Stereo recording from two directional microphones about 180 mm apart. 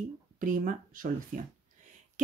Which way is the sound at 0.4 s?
50° right (ahead or behind).